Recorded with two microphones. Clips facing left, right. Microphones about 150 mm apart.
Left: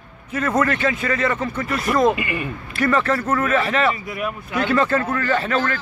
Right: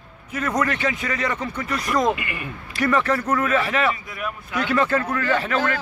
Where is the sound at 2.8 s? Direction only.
15° right (ahead or behind).